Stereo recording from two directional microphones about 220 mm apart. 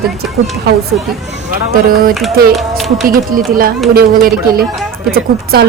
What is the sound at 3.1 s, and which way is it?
A woman's voice, 40° right (ahead or behind).